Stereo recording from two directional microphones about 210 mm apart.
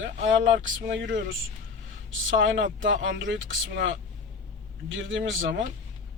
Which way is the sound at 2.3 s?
65° right (ahead or behind).